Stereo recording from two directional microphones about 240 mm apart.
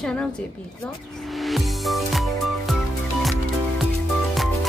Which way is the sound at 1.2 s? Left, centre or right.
Centre.